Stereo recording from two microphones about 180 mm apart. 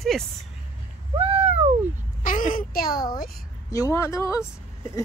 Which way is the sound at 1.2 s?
35° right (ahead or behind).